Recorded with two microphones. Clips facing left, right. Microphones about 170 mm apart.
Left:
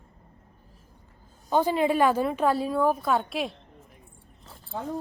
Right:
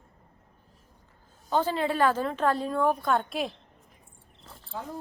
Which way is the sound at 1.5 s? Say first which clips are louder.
Left 4 dB; 15° left (ahead or behind).